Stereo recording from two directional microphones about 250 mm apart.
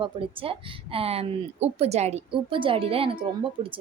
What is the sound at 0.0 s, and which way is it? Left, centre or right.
Speech, right.